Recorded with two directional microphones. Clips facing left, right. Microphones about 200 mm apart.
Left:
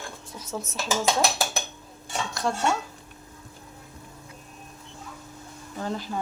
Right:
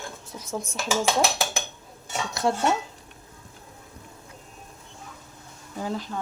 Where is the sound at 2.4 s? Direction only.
20° right (ahead or behind).